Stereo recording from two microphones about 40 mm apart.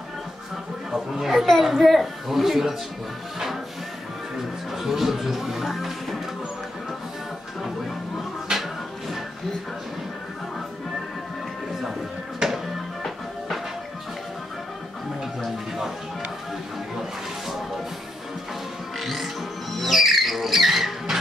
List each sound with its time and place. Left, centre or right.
0.9 s a woman's voice: centre
4.7 s speech: centre
8.5 s a sound: centre
12.4 s music: centre
15.4 s music: centre
18.9 s music: centre